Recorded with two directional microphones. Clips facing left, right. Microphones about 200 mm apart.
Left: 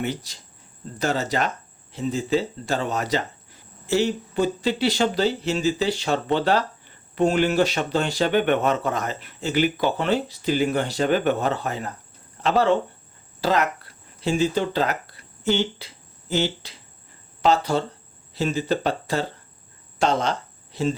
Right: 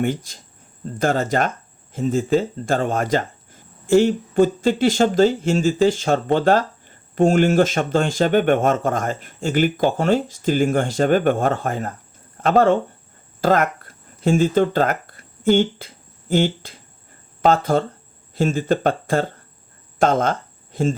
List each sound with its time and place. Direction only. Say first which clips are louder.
0.0 s speech: right 6 dB; 50° right (ahead or behind)